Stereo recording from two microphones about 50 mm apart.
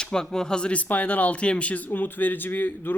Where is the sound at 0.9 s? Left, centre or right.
Left.